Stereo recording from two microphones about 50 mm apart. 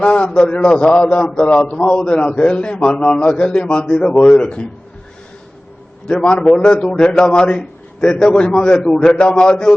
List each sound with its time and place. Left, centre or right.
0.0 s a man's voice: left
1.5 s a man's voice: left
6.1 s a man's voice: centre